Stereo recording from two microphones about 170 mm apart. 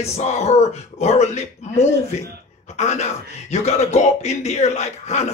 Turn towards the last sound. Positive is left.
turn(degrees=40)  # may be behind; listen again after turning